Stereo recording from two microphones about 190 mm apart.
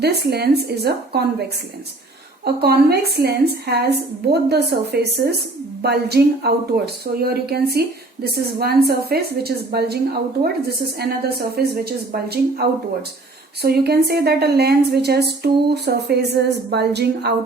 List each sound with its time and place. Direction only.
0.0 s speech: 60° right (ahead or behind)